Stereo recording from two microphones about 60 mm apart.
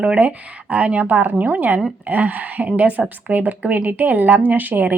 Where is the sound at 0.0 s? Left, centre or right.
Right.